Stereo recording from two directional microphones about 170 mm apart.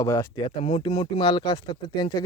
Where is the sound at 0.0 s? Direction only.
20° left (ahead or behind).